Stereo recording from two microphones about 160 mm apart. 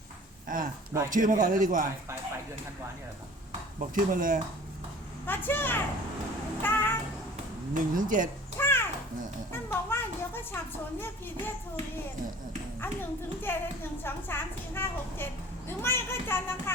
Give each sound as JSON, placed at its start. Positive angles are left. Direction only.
{"t": 0.4, "sound": "a man's voice", "side_deg": -55}
{"t": 3.8, "sound": "a man's voice", "side_deg": -55}
{"t": 5.2, "sound": "a woman's voice", "side_deg": 10}
{"t": 6.6, "sound": "music", "side_deg": 10}
{"t": 7.7, "sound": "a man's voice", "side_deg": -55}
{"t": 8.5, "sound": "a sound", "side_deg": 15}
{"t": 13.5, "sound": "a woman's voice", "side_deg": 15}